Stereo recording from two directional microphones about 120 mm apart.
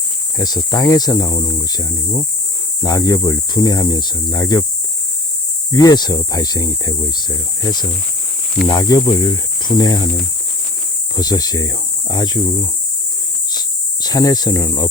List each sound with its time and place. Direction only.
0.3 s speech: 30° left (ahead or behind)
5.7 s speech: 35° left (ahead or behind)
11.2 s speech: 30° left (ahead or behind)
13.5 s cricket: 35° left (ahead or behind)